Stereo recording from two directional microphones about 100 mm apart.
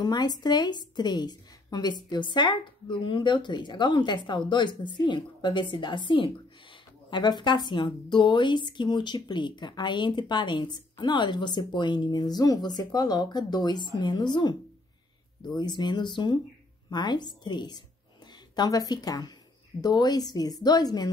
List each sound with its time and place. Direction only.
0.0 s a woman's voice: 45° left (ahead or behind)